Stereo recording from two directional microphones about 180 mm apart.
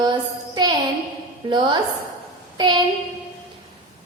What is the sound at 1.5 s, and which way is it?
Speech, 25° right (ahead or behind).